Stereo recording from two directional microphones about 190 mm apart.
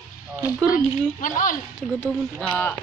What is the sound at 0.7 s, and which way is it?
Speech, 45° left (ahead or behind).